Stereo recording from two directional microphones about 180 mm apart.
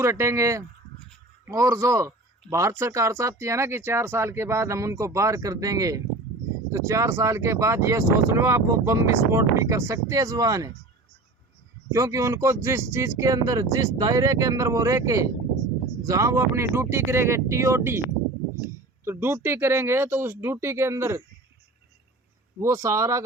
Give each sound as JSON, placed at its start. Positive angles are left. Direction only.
{"t": 0.0, "sound": "speech", "side_deg": -15}
{"t": 11.9, "sound": "speech", "side_deg": -15}
{"t": 22.6, "sound": "speech", "side_deg": -15}